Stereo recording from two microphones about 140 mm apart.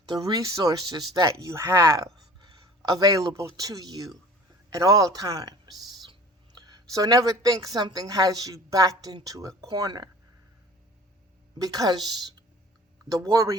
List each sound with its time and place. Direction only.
0.0 s a woman's voice: 30° right (ahead or behind)
11.6 s speech: 25° right (ahead or behind)